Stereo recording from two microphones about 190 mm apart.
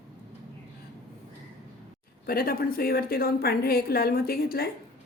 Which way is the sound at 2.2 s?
50° left (ahead or behind).